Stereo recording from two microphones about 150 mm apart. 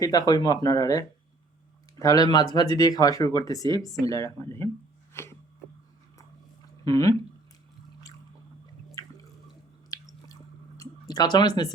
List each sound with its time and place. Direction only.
0.0 s speech: 25° left (ahead or behind)
5.1 s a sound: 15° left (ahead or behind)
6.8 s speech: 25° left (ahead or behind)
9.9 s squish: 25° left (ahead or behind)
11.1 s speech: 25° left (ahead or behind)